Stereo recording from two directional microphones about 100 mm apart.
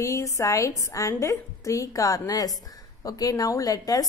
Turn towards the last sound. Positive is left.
turn(degrees=40)  # may be behind; listen again after turning